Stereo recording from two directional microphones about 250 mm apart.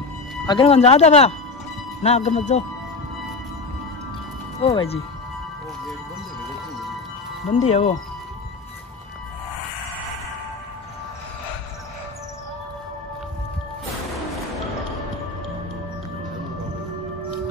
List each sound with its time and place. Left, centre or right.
0.5 s speech: left
4.6 s speech: left
7.4 s speech: left